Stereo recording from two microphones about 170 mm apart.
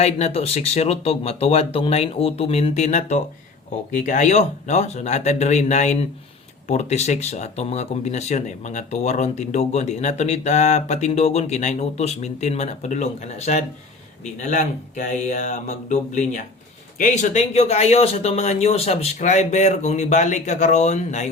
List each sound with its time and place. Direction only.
0.0 s speech: 40° left (ahead or behind)